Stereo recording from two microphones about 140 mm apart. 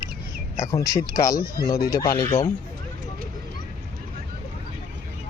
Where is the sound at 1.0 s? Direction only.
25° left (ahead or behind).